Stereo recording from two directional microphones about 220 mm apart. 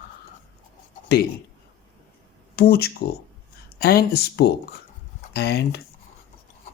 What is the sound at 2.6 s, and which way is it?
Speech, 45° left (ahead or behind).